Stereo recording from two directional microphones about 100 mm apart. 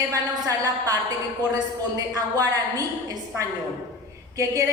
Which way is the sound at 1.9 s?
35° right (ahead or behind).